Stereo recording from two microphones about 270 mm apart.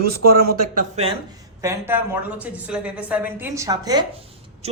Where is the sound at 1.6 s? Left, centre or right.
Centre.